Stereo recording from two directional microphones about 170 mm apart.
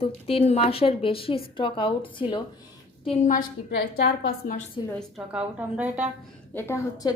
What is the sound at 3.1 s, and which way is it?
Speech, 45° left (ahead or behind).